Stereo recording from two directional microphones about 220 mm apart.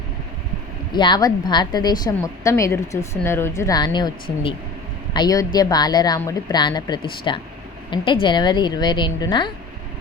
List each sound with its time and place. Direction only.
0.9 s a woman's voice: 20° left (ahead or behind)